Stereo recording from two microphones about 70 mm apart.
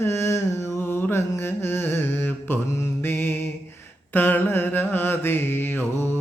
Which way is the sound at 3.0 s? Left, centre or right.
Left.